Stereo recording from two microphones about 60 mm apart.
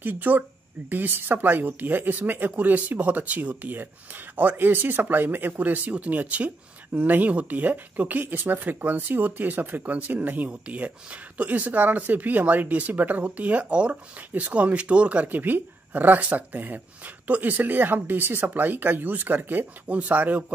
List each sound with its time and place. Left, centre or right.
0.0 s speech: right